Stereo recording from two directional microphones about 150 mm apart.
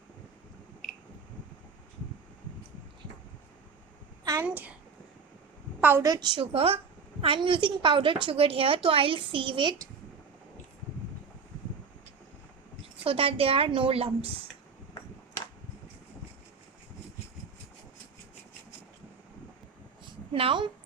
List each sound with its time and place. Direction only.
0.8 s a sound: 5° right (ahead or behind)
4.2 s a sound: 25° right (ahead or behind)
4.4 s a child's voice: 10° right (ahead or behind)
5.8 s a woman's voice: 15° right (ahead or behind)
6.1 s a woman's voice: 30° right (ahead or behind)
13.1 s a woman's voice: 40° right (ahead or behind)
20.3 s a woman's voice: 35° right (ahead or behind)